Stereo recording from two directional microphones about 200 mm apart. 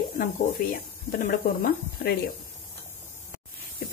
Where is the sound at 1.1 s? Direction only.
45° left (ahead or behind).